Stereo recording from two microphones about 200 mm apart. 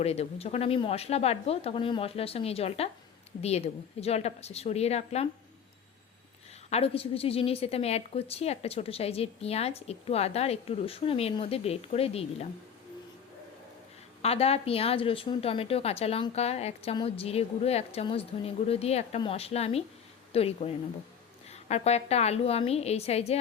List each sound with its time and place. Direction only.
0.0 s a woman's voice: 30° left (ahead or behind)
6.7 s a woman's voice: 30° left (ahead or behind)
14.2 s a woman's voice: 30° left (ahead or behind)